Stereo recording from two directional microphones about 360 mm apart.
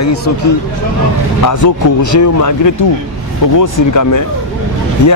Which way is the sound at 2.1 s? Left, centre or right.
Left.